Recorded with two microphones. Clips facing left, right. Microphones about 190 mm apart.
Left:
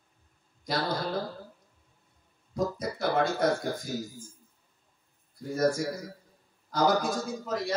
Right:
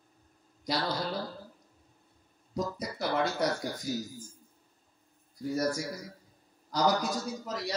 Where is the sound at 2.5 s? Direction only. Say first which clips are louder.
Left 4 dB; 50° left (ahead or behind).